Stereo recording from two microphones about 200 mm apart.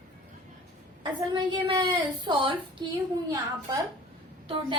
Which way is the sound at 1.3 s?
25° right (ahead or behind).